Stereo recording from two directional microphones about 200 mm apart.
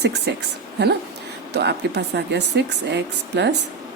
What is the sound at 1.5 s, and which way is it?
A woman's voice, 55° right (ahead or behind).